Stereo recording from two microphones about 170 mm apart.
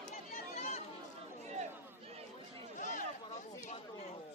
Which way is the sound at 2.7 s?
45° left (ahead or behind).